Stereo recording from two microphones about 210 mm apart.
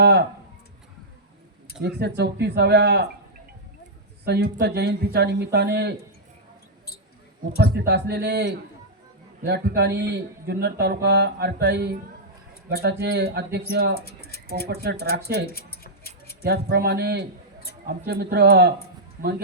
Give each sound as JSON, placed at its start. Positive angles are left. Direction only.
{"t": 0.0, "sound": "a sound", "side_deg": -50}
{"t": 1.8, "sound": "speech", "side_deg": -55}
{"t": 4.3, "sound": "speech", "side_deg": -50}
{"t": 7.6, "sound": "speech", "side_deg": -50}
{"t": 14.0, "sound": "speech", "side_deg": 50}
{"t": 14.7, "sound": "speech", "side_deg": -50}
{"t": 15.4, "sound": "a sound", "side_deg": 45}
{"t": 16.4, "sound": "speech", "side_deg": -50}